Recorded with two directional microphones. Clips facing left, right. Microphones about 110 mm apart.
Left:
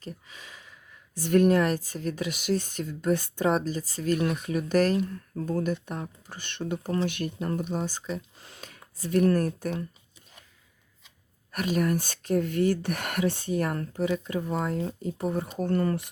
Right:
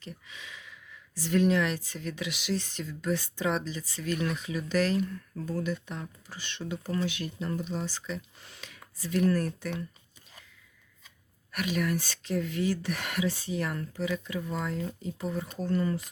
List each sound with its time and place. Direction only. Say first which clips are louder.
0.0 s a sound: left 3 dB; 40° left (ahead or behind)
1.2 s speech: left 4 dB; 50° left (ahead or behind)
11.5 s speech: left 4 dB; 40° left (ahead or behind); by 16.0 s 55° left (ahead or behind)